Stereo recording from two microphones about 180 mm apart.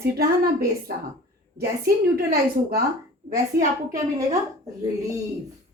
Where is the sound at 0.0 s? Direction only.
60° right (ahead or behind).